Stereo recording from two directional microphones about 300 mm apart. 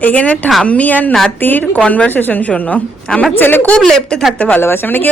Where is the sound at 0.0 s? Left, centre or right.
Centre.